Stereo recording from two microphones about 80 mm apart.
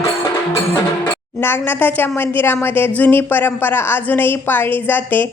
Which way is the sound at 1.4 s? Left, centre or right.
Left.